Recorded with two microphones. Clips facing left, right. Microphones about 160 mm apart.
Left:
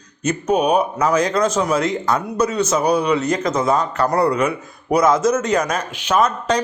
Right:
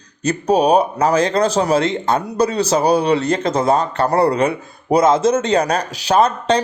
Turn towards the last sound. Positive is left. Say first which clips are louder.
# right 3 dB
turn(degrees=-30)  # may be behind; listen again after turning